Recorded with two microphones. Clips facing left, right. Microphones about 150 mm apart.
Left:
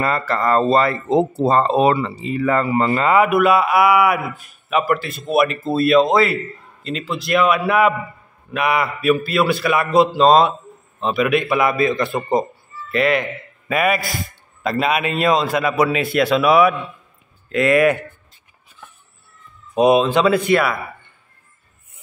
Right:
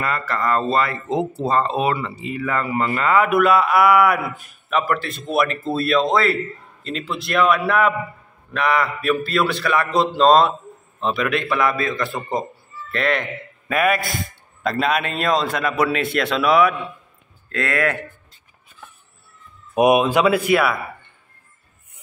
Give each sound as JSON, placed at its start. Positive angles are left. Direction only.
{"t": 0.0, "sound": "speech", "side_deg": 30}
{"t": 3.2, "sound": "a man's voice", "side_deg": 5}
{"t": 12.9, "sound": "a man's voice", "side_deg": 5}
{"t": 17.5, "sound": "a man's voice", "side_deg": 15}
{"t": 19.7, "sound": "speech", "side_deg": -15}